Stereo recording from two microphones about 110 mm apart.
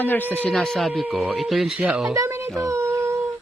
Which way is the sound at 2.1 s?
25° right (ahead or behind).